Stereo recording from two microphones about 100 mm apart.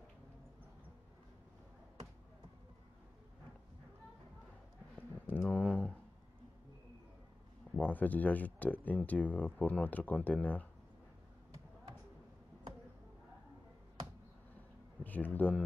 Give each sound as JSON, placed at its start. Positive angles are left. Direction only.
{"t": 5.2, "sound": "a sound", "side_deg": 20}
{"t": 7.7, "sound": "speech", "side_deg": 15}
{"t": 15.0, "sound": "a man's voice", "side_deg": 15}